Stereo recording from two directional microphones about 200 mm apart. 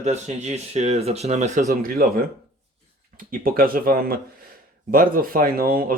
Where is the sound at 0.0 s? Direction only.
35° right (ahead or behind).